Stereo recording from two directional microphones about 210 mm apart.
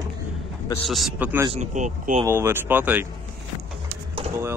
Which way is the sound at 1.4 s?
35° right (ahead or behind).